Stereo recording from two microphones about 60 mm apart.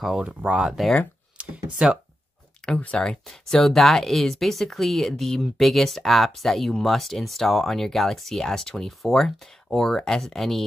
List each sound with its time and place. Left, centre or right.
0.0 s speech: centre
1.4 s a sound: right
1.8 s speech: centre
2.6 s speech: centre
3.3 s speech: centre